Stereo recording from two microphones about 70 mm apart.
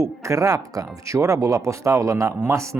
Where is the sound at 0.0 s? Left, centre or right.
Right.